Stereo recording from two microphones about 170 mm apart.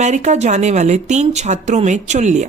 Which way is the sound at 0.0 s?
45° right (ahead or behind).